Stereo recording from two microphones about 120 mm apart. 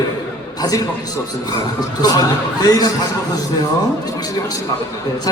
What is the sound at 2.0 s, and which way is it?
Speech, 35° left (ahead or behind).